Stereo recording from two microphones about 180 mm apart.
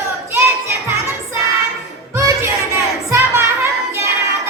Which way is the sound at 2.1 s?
15° right (ahead or behind).